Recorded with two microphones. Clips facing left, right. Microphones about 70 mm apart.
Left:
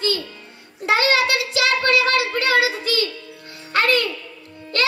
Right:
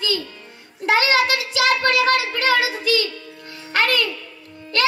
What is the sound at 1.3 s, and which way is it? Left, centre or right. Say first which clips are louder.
Child singing: right 1 dB; left.